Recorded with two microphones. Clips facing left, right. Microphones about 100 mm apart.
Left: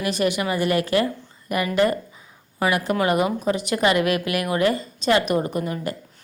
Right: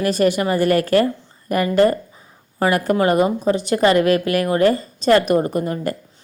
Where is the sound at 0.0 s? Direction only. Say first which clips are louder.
Right 5 dB; 40° right (ahead or behind).